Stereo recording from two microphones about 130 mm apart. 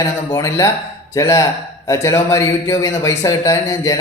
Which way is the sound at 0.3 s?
30° left (ahead or behind).